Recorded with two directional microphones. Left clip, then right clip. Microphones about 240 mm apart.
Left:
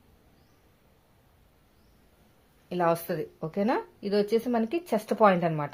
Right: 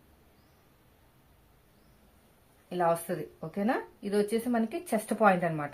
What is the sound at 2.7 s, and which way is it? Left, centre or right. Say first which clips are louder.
Speech: left 2 dB; left.